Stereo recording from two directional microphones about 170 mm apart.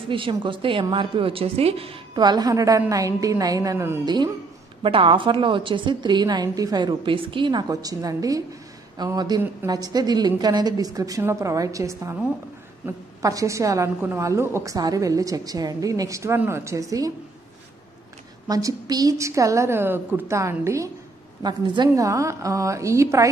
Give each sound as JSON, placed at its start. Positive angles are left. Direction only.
{"t": 0.1, "sound": "a woman's voice", "side_deg": -30}
{"t": 4.0, "sound": "a woman's voice", "side_deg": -25}
{"t": 18.5, "sound": "a woman's voice", "side_deg": -20}